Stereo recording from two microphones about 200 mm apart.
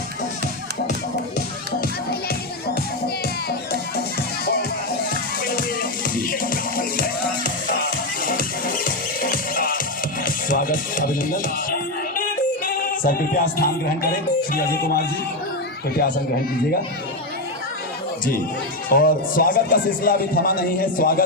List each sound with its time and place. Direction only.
5.5 s music: 45° left (ahead or behind)
8.2 s music: 45° left (ahead or behind)
12.6 s a man's voice: 45° left (ahead or behind)
18.9 s a man's voice: 45° left (ahead or behind)